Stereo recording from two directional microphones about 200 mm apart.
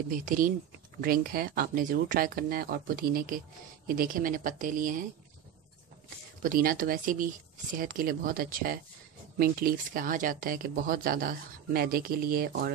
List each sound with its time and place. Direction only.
0.1 s speech: 40° right (ahead or behind)
6.4 s speech: 45° right (ahead or behind)